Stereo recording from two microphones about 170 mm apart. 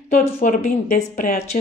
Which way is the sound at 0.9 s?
60° left (ahead or behind).